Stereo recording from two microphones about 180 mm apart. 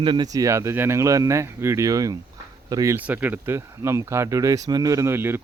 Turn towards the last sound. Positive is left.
turn(degrees=-15)  # may be behind; listen again after turning